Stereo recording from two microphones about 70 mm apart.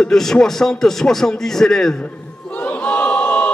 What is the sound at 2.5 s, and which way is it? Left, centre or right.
Battle cry, left.